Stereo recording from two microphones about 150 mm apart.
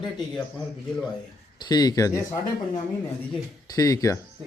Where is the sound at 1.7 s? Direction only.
25° left (ahead or behind).